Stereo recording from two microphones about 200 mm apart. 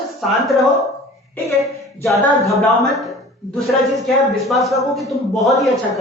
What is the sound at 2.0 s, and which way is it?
A woman's voice, centre (ahead or behind).